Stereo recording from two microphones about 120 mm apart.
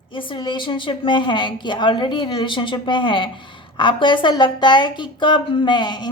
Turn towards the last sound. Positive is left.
turn(degrees=40)  # may be behind; listen again after turning